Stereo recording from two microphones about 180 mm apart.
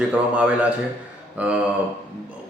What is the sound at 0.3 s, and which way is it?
A man's voice, 5° right (ahead or behind).